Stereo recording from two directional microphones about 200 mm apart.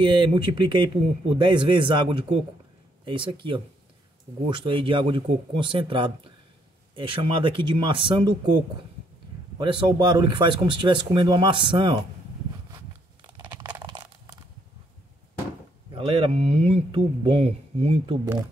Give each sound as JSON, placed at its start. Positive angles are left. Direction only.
{"t": 0.0, "sound": "speech", "side_deg": -25}
{"t": 9.6, "sound": "speech", "side_deg": -25}
{"t": 13.5, "sound": "a sound", "side_deg": -20}
{"t": 15.9, "sound": "speech", "side_deg": -25}